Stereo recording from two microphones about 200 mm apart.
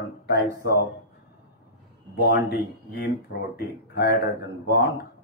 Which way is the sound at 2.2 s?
50° left (ahead or behind).